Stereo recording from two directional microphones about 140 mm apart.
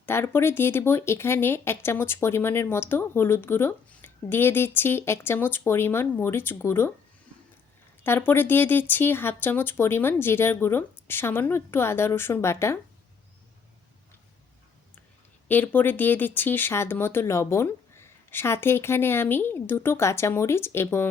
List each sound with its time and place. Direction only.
0.0 s speech: 15° left (ahead or behind)
8.0 s speech: 15° left (ahead or behind)
15.4 s speech: 10° left (ahead or behind)